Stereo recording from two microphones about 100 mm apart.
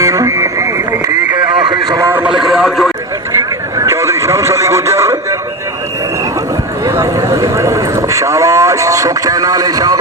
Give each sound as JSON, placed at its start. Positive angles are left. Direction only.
{"t": 0.0, "sound": "radio", "side_deg": -35}
{"t": 2.4, "sound": "radio", "side_deg": -5}
{"t": 3.3, "sound": "a sound", "side_deg": -30}
{"t": 6.9, "sound": "vehicle", "side_deg": -30}